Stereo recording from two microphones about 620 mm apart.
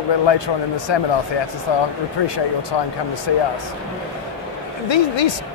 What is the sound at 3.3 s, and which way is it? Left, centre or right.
Speech, left.